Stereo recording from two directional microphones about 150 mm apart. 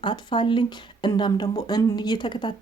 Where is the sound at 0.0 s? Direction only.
30° left (ahead or behind).